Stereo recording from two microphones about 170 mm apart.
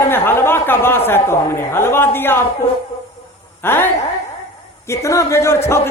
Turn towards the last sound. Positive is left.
turn(degrees=15)  # may be behind; listen again after turning